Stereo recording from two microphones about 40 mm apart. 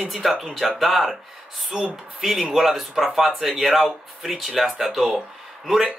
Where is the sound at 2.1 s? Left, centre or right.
Centre.